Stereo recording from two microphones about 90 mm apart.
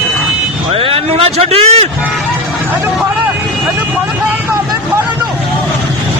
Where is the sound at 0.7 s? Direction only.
90° right.